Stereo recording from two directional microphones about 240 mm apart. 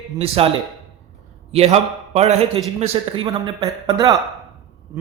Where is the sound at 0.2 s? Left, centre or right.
Right.